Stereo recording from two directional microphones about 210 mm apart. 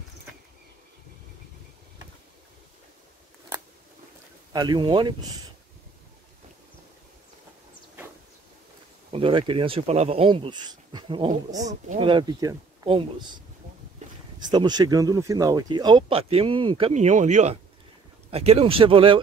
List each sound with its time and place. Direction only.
4.5 s speech: 20° right (ahead or behind)
9.1 s speech: 25° right (ahead or behind)
14.4 s speech: 20° right (ahead or behind)